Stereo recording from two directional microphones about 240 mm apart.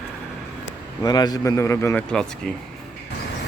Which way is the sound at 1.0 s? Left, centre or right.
Centre.